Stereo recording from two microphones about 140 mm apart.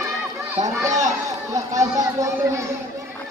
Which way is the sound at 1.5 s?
25° right (ahead or behind).